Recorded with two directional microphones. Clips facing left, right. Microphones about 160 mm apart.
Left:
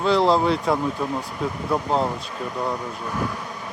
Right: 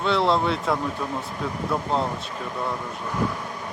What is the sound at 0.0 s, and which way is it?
Speech, centre (ahead or behind).